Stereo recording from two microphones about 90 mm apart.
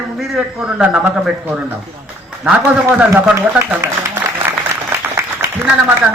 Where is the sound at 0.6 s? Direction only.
10° right (ahead or behind).